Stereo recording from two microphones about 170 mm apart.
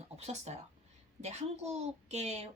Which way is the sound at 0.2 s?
40° right (ahead or behind).